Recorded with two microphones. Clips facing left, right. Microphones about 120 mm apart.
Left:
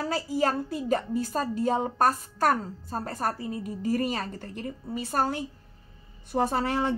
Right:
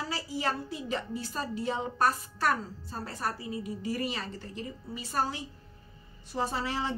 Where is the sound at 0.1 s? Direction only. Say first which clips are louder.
Left 8 dB; 45° left (ahead or behind).